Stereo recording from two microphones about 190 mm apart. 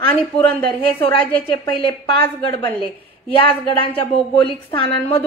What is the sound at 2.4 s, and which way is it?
Speech, 25° left (ahead or behind).